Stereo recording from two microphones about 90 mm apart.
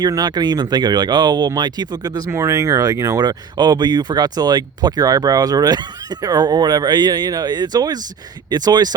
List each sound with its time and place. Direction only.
0.0 s speech: 50° right (ahead or behind)
2.3 s speech: 35° right (ahead or behind)